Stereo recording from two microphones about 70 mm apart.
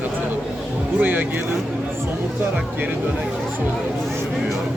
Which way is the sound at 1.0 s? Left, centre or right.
Right.